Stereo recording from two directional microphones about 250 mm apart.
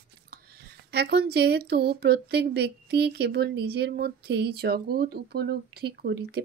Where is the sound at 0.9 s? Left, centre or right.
Right.